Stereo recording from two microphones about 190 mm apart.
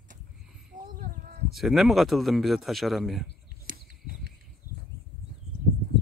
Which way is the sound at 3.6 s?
55° right (ahead or behind).